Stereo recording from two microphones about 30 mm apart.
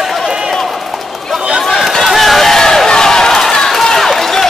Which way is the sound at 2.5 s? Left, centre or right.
Centre.